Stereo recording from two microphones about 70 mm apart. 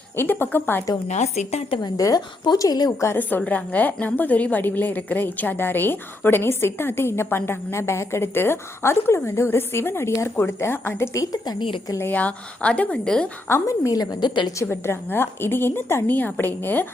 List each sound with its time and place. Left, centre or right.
0.2 s a woman's voice: left
2.0 s speech: left
2.6 s a woman's voice: left
3.2 s a woman's voice: left
11.2 s speech: left
12.1 s a woman's voice: centre
13.5 s a woman's voice: left
14.6 s a woman's voice: left